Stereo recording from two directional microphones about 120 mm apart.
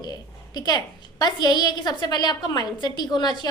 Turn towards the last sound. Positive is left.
turn(degrees=40)  # may be behind; listen again after turning